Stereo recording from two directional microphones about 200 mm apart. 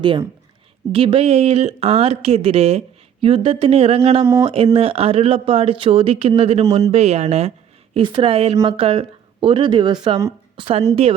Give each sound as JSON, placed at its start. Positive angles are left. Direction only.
{"t": 0.0, "sound": "speech", "side_deg": -25}
{"t": 6.7, "sound": "speech", "side_deg": -15}
{"t": 6.9, "sound": "speech", "side_deg": -30}